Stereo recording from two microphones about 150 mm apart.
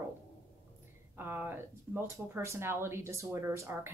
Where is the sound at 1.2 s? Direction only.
15° right (ahead or behind).